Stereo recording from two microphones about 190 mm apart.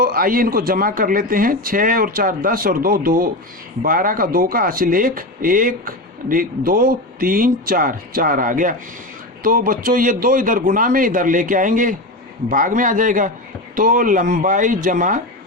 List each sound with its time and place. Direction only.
0.0 s speech: 50° right (ahead or behind)